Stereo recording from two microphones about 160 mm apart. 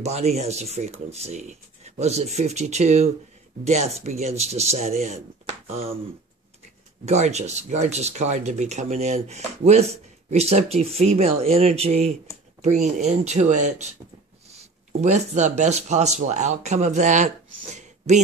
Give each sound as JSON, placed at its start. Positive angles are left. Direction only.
{"t": 0.0, "sound": "speech", "side_deg": -40}
{"t": 7.1, "sound": "speech", "side_deg": -45}